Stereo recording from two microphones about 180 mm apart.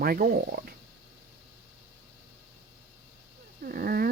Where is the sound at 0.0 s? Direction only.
55° right (ahead or behind).